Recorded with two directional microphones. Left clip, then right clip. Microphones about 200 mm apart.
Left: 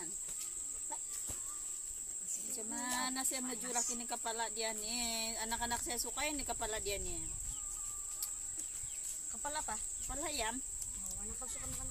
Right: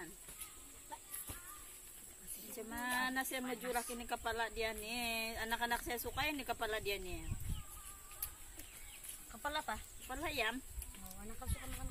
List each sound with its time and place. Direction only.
2.7 s a sound: 25° left (ahead or behind)
3.4 s speech: centre (ahead or behind)
3.7 s speech: 25° left (ahead or behind)
9.4 s snake: 10° right (ahead or behind)
10.0 s speech: 15° left (ahead or behind)